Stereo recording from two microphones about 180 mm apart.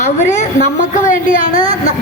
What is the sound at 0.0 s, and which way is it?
A woman's voice, 40° left (ahead or behind).